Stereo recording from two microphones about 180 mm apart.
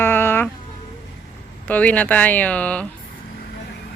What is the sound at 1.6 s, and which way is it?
Speech, 10° left (ahead or behind).